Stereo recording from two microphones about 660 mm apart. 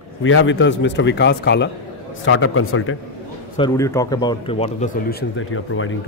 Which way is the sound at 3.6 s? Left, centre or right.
Centre.